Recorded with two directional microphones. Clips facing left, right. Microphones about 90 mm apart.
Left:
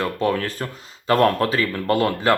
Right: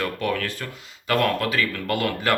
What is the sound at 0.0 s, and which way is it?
Speech, 30° left (ahead or behind).